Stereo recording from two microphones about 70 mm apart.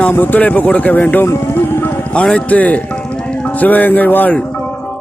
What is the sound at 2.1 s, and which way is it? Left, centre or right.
A man's voice, centre.